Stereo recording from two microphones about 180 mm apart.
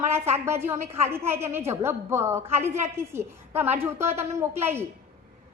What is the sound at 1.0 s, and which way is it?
A woman's voice, 15° right (ahead or behind).